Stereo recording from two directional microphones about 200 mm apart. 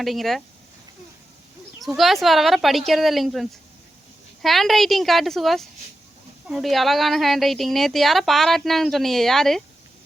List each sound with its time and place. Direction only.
0.0 s a woman's voice: centre (ahead or behind)
1.8 s a woman's voice: centre (ahead or behind)